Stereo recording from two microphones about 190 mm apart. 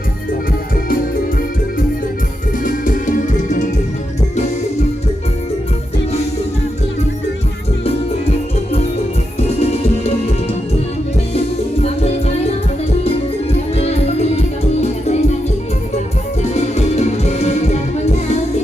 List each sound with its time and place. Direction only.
2.6 s music: 45° left (ahead or behind)
9.6 s music: 35° left (ahead or behind)
11.8 s music: 30° left (ahead or behind)
13.7 s music: 35° left (ahead or behind)
16.4 s music: 35° left (ahead or behind)